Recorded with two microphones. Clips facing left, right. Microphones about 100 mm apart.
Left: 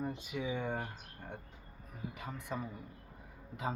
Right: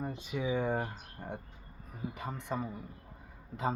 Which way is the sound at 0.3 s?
5° right (ahead or behind).